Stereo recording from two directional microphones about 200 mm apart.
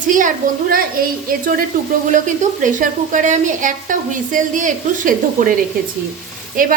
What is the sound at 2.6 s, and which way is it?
Speech, 40° right (ahead or behind).